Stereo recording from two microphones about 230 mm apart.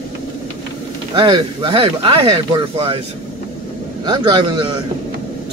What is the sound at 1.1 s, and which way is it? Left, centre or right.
Speech, right.